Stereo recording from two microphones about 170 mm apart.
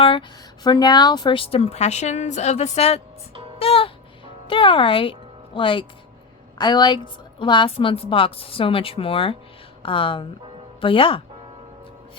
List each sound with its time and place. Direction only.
0.0 s speech: 30° left (ahead or behind)
3.6 s music: 35° left (ahead or behind)
4.4 s speech: 30° left (ahead or behind)